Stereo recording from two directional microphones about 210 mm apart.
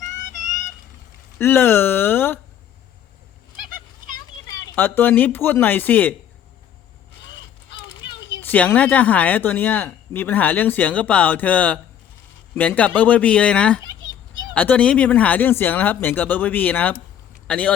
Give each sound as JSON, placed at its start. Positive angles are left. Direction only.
{"t": 0.2, "sound": "vehicle", "side_deg": 35}
{"t": 1.4, "sound": "speech", "side_deg": 10}
{"t": 4.1, "sound": "a child's voice", "side_deg": 15}
{"t": 8.4, "sound": "speech", "side_deg": 10}